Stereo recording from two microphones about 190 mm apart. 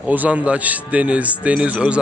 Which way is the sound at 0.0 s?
10° right (ahead or behind).